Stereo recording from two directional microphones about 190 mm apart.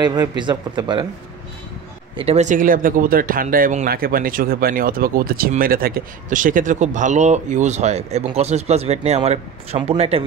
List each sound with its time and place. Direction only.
0.0 s speech: 20° right (ahead or behind)
2.1 s speech: 35° right (ahead or behind)